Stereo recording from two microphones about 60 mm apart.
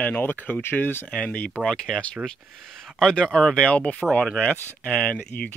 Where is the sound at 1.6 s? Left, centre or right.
Centre.